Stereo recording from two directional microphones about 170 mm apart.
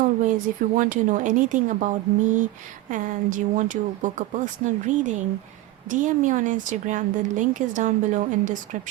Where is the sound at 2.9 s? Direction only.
50° right (ahead or behind).